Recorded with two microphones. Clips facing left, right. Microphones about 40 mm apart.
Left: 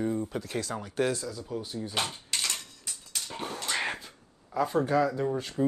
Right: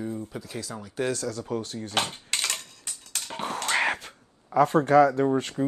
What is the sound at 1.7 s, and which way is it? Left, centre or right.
Speech, right.